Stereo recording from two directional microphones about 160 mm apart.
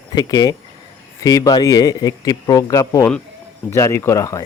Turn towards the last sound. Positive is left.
turn(degrees=20)  # may be behind; listen again after turning